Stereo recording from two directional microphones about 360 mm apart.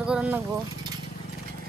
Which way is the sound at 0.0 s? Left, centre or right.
Centre.